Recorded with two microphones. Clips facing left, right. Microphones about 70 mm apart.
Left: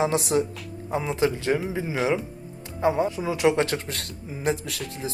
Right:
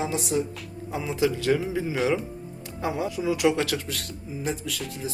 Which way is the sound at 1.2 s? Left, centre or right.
Left.